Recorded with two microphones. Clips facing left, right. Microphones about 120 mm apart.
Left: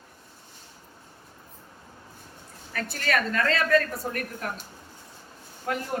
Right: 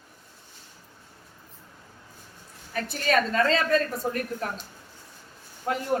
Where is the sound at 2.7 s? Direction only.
20° right (ahead or behind).